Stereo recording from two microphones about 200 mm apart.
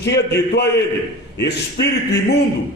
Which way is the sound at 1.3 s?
60° left (ahead or behind).